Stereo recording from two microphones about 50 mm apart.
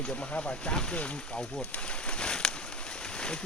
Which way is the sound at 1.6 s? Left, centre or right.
Left.